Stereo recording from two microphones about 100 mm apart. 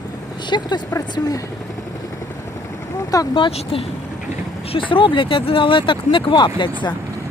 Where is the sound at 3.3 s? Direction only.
75° left (ahead or behind).